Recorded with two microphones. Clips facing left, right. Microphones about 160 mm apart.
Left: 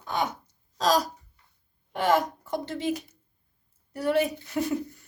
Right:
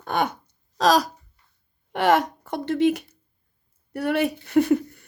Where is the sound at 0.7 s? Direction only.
75° right (ahead or behind).